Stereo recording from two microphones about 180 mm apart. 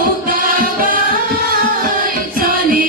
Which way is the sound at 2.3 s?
50° right (ahead or behind).